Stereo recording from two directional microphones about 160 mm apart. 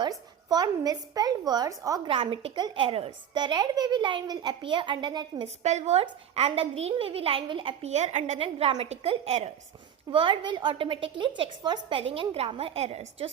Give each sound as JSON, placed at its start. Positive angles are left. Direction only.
{"t": 0.0, "sound": "a woman's voice", "side_deg": -25}
{"t": 5.6, "sound": "a woman's voice", "side_deg": -45}
{"t": 10.1, "sound": "a woman's voice", "side_deg": -30}